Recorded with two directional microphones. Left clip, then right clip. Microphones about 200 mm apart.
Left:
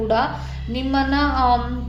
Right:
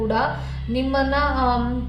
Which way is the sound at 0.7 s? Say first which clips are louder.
Even; 35° left (ahead or behind).